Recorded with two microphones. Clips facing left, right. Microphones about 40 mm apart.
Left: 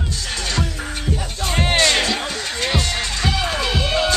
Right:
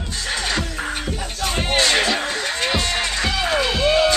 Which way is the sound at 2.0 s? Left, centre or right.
Right.